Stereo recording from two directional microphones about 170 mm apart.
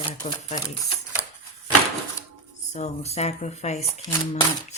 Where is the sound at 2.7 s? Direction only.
40° left (ahead or behind).